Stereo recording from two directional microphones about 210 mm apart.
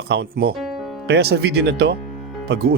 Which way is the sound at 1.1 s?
50° right (ahead or behind).